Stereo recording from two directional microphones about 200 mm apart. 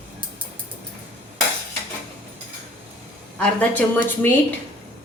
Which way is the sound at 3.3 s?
5° left (ahead or behind).